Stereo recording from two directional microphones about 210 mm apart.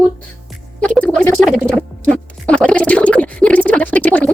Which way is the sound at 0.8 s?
5° left (ahead or behind).